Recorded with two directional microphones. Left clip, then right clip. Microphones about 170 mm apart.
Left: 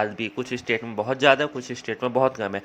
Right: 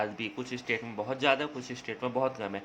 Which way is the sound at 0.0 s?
30° left (ahead or behind).